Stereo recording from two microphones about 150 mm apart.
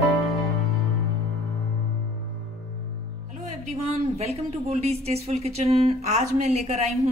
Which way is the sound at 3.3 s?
50° right (ahead or behind).